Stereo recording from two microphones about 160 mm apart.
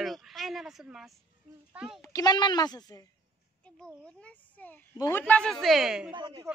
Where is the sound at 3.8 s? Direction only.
5° left (ahead or behind).